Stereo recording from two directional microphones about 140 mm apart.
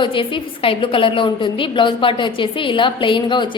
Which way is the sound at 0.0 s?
35° left (ahead or behind).